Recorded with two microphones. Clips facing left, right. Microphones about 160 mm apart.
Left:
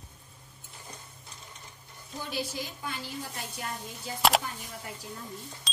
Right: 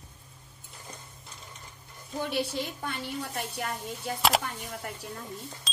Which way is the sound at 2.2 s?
65° right (ahead or behind).